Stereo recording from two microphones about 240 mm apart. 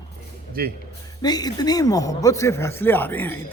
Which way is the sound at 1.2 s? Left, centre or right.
Centre.